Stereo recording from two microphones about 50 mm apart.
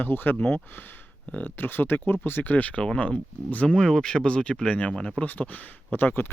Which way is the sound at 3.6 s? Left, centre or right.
Centre.